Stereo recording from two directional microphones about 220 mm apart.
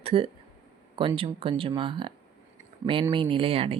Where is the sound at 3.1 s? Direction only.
25° right (ahead or behind).